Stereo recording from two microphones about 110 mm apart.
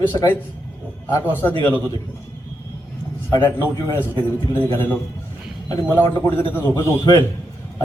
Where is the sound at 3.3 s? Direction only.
25° left (ahead or behind).